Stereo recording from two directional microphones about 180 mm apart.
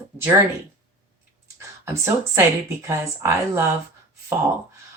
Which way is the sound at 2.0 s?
15° right (ahead or behind).